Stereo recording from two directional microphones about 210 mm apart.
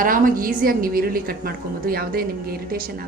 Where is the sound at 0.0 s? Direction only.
40° right (ahead or behind).